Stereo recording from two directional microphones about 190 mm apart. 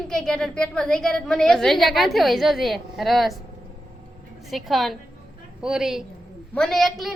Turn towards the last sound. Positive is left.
turn(degrees=0)  # may be behind; listen again after turning